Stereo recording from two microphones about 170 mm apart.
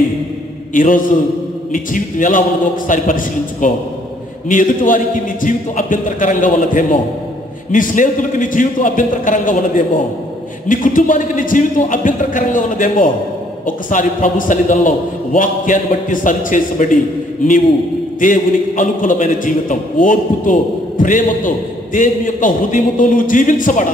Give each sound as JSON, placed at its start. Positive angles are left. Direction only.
{"t": 0.7, "sound": "a man's voice", "side_deg": 50}
{"t": 18.2, "sound": "a man's voice", "side_deg": 50}